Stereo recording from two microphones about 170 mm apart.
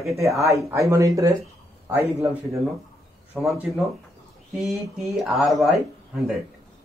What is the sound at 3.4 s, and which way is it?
Speech, centre (ahead or behind).